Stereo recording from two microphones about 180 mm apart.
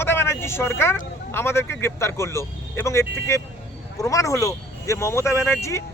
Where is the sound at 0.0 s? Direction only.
15° left (ahead or behind).